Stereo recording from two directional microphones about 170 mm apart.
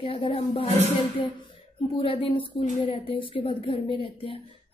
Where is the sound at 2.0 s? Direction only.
30° left (ahead or behind).